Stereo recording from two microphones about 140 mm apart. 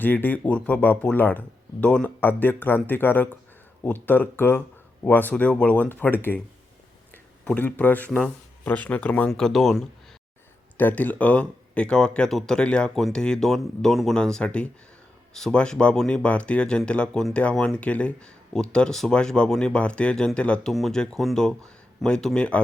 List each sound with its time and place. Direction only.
0.0 s speech: 15° left (ahead or behind)
7.4 s speech: 10° left (ahead or behind)
10.8 s speech: 10° left (ahead or behind)